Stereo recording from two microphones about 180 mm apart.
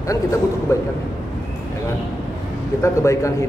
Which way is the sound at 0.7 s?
15° left (ahead or behind).